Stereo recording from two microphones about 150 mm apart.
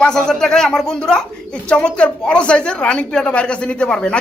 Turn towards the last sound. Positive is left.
turn(degrees=5)  # may be behind; listen again after turning